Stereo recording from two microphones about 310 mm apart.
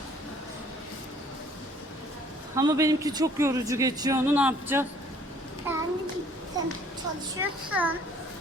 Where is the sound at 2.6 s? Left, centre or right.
Centre.